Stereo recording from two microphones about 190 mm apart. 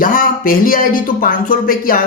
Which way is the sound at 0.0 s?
45° left (ahead or behind).